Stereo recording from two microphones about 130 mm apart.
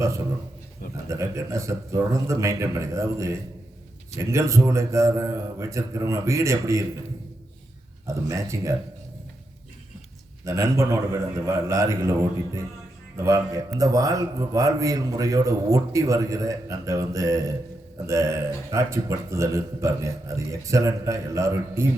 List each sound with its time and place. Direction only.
1.0 s a man's voice: 25° right (ahead or behind)
8.0 s a man's voice: 25° right (ahead or behind)
10.4 s a man's voice: 20° right (ahead or behind)